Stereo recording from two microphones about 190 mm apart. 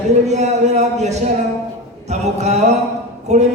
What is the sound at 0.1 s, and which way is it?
Speech, 35° right (ahead or behind).